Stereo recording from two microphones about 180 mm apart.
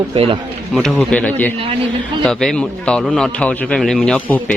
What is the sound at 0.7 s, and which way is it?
A man's voice, centre (ahead or behind).